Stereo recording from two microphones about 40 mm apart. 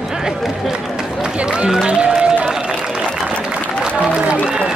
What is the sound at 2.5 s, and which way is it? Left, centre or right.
Applause, centre.